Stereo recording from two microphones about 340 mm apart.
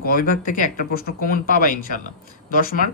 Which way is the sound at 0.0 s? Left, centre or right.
Left.